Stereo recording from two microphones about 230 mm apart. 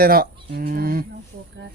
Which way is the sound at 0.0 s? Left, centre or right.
Right.